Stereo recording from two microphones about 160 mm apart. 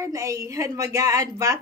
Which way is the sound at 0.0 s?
20° right (ahead or behind).